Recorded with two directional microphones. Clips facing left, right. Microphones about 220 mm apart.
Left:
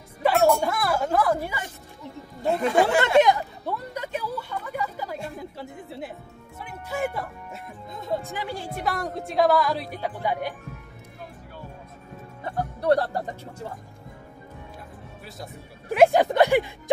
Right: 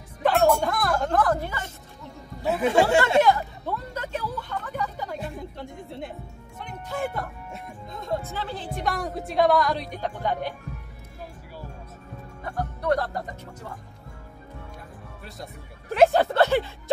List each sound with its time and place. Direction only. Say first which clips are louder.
0.2 s music: even; 5° left (ahead or behind)
0.5 s speech: even; centre (ahead or behind)
2.4 s speech: even; 5° right (ahead or behind)
2.7 s speech: right 2 dB; 25° right (ahead or behind)
3.2 s speech: left 1 dB; 15° left (ahead or behind)
8.1 s speech: left 1 dB; 15° left (ahead or behind)
12.8 s speech: left 4 dB; 30° left (ahead or behind)
15.2 s speech: even; centre (ahead or behind)
15.9 s speech: left 1 dB; 10° left (ahead or behind)